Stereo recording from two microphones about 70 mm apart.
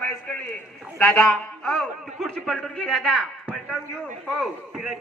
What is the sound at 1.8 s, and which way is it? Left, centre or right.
A man's voice, centre.